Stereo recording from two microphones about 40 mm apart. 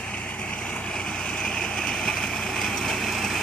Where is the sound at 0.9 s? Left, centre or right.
Centre.